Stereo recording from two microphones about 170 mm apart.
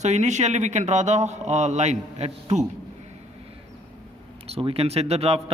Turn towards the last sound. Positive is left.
turn(degrees=-35)  # may be behind; listen again after turning